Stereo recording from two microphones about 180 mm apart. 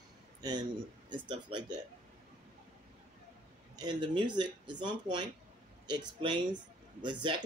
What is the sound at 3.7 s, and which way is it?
Speech, 25° right (ahead or behind).